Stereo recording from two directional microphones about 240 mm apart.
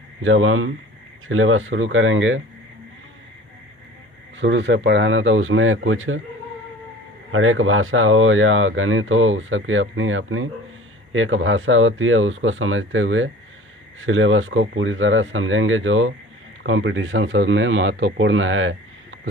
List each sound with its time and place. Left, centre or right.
0.2 s speech: right
4.4 s speech: right
7.3 s speech: right